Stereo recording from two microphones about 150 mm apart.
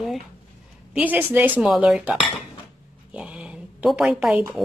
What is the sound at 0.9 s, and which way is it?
Speech, 10° right (ahead or behind).